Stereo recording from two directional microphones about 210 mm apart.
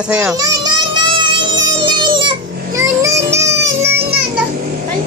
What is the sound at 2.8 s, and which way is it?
Child singing, 15° right (ahead or behind).